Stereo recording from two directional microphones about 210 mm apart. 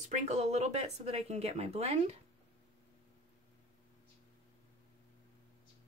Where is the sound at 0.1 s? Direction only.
35° right (ahead or behind).